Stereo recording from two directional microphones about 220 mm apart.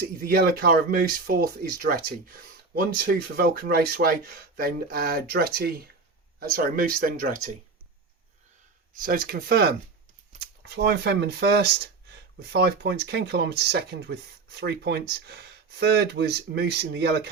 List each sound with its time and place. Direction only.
0.0 s speech: 45° right (ahead or behind)
8.9 s speech: 40° right (ahead or behind)